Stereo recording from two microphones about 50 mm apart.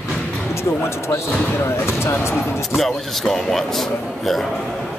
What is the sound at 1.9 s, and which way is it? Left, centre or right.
Speech, left.